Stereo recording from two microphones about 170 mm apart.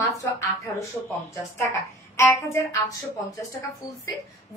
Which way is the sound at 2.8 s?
20° left (ahead or behind).